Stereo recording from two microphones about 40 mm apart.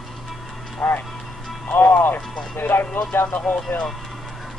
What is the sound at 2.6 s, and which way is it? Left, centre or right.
Music, left.